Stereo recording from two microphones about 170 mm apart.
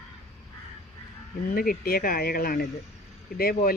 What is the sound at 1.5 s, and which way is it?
Speech, 60° left (ahead or behind).